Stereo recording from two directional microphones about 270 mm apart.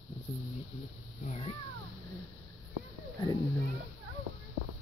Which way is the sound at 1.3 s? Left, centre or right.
Left.